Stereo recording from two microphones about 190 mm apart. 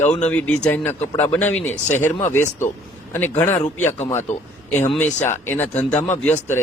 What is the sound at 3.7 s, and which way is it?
Speech, 40° left (ahead or behind).